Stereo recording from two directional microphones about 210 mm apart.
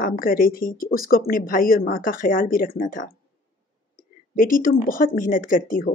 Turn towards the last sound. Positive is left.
turn(degrees=40)  # may be behind; listen again after turning